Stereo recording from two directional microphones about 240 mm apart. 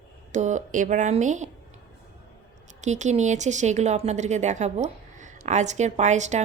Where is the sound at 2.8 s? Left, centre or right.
Right.